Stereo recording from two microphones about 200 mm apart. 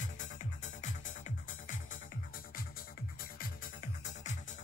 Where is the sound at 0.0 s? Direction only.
40° left (ahead or behind).